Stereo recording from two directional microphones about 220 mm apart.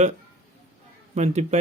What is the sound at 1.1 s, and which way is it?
Speech, 30° right (ahead or behind).